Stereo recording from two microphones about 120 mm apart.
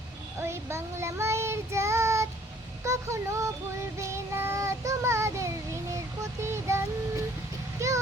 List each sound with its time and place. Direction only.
0.3 s child singing: 20° right (ahead or behind)